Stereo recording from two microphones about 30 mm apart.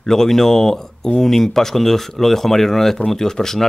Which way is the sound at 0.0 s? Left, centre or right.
Centre.